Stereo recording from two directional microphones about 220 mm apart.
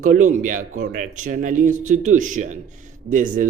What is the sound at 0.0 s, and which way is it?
Speech, 35° right (ahead or behind).